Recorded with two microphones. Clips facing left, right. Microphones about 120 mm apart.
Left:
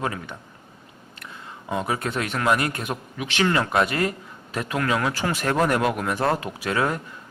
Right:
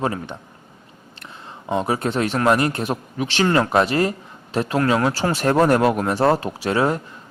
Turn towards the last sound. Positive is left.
turn(degrees=-25)  # may be behind; listen again after turning